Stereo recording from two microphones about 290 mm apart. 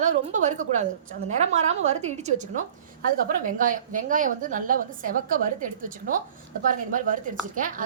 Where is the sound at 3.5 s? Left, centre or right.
Right.